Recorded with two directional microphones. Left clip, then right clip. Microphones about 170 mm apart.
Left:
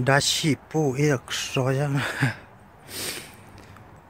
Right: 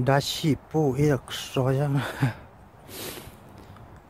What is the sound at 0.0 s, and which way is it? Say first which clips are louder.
Speech: left 3 dB; 5° right (ahead or behind).